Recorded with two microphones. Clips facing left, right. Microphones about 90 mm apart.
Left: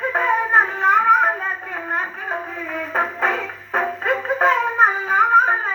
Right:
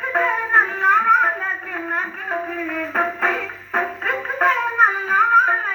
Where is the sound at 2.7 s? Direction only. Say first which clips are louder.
Left 1 dB; 15° left (ahead or behind).